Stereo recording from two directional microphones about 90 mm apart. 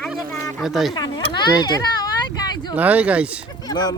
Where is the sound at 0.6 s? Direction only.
5° right (ahead or behind).